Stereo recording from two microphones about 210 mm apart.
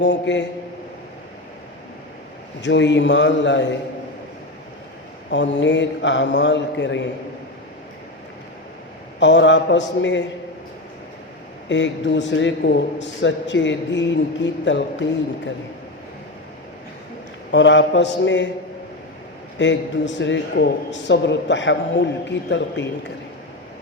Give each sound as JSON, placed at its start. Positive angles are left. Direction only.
{"t": 0.0, "sound": "a man's voice", "side_deg": 55}
{"t": 2.6, "sound": "a man's voice", "side_deg": 60}
{"t": 5.3, "sound": "a man's voice", "side_deg": 60}
{"t": 9.2, "sound": "a man's voice", "side_deg": 60}
{"t": 11.7, "sound": "a man's voice", "side_deg": 60}
{"t": 17.5, "sound": "a man's voice", "side_deg": 60}
{"t": 19.5, "sound": "a man's voice", "side_deg": 60}